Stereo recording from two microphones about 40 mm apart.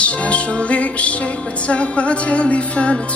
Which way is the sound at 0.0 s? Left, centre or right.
Left.